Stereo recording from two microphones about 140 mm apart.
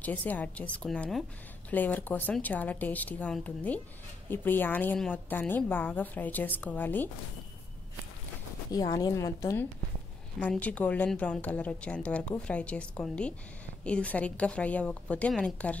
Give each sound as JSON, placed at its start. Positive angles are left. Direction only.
{"t": 0.0, "sound": "speech", "side_deg": 10}
{"t": 8.7, "sound": "a woman's voice", "side_deg": 25}
{"t": 10.4, "sound": "speech", "side_deg": 10}